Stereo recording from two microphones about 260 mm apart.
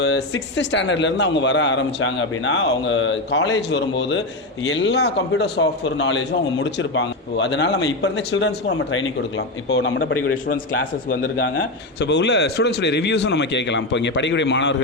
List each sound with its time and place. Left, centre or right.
0.0 s a man's voice: left